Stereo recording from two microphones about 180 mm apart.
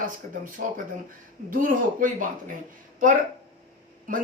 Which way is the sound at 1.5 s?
50° right (ahead or behind).